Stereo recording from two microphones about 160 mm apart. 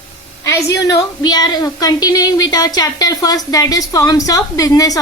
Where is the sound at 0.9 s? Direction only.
25° left (ahead or behind).